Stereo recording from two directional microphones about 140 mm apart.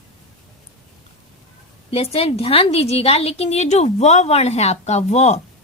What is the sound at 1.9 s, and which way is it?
A woman's voice, 45° left (ahead or behind).